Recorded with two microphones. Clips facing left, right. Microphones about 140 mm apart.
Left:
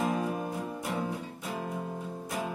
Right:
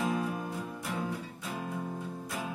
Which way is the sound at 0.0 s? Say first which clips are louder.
Left 2 dB; 20° left (ahead or behind).